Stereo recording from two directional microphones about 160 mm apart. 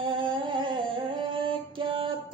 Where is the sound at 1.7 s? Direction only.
30° right (ahead or behind).